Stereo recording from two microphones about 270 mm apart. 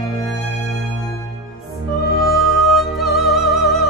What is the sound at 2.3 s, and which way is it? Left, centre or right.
Music, centre.